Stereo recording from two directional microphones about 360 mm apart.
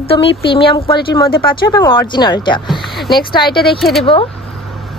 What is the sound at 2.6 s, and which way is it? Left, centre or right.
Speech, centre.